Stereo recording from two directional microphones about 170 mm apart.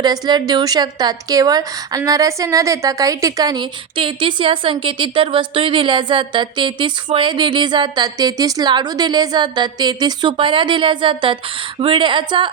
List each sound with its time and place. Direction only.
0.0 s a woman's voice: 25° right (ahead or behind)